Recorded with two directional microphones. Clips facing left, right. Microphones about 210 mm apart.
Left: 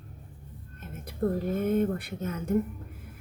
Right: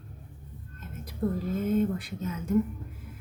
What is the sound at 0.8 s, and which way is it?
Speech, 60° left (ahead or behind).